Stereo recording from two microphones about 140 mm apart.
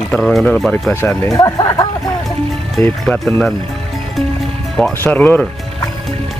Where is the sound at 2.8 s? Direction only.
10° left (ahead or behind).